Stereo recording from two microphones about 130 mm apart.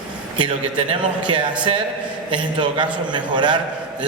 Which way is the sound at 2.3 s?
35° right (ahead or behind).